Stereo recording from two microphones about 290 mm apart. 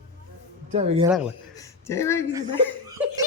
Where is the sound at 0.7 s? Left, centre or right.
Right.